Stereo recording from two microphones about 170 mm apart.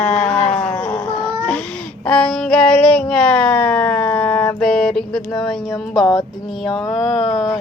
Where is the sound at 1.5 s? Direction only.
5° left (ahead or behind).